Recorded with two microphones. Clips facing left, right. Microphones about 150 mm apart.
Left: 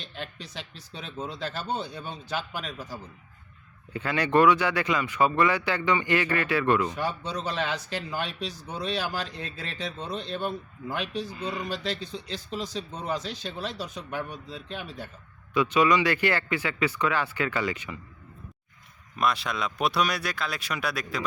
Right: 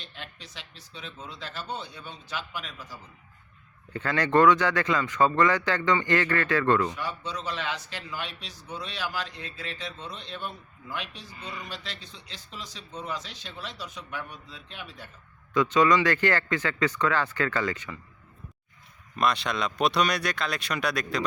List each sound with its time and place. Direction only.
0.0 s speech: 40° left (ahead or behind)
3.9 s speech: 10° left (ahead or behind)
6.9 s speech: 35° left (ahead or behind)
15.5 s speech: 10° left (ahead or behind)
19.1 s speech: 5° left (ahead or behind)